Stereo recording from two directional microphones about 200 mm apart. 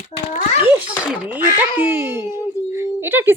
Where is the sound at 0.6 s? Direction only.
10° right (ahead or behind).